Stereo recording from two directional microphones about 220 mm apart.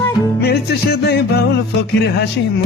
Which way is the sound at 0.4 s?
45° left (ahead or behind).